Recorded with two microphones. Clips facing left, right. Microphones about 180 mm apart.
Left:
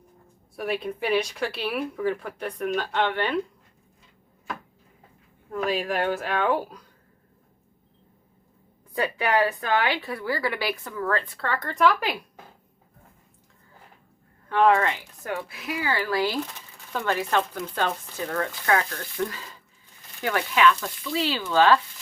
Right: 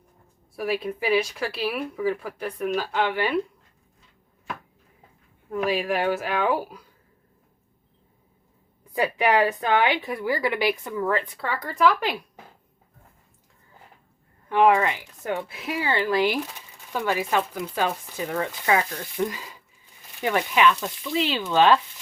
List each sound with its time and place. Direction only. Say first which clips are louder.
0.5 s speech: right 2 dB; centre (ahead or behind)
5.5 s speech: right 2 dB; 5° right (ahead or behind)
9.0 s a woman's voice: right 2 dB; 15° right (ahead or behind); by 12.1 s centre (ahead or behind)
14.5 s a woman's voice: right 1 dB; 15° right (ahead or behind)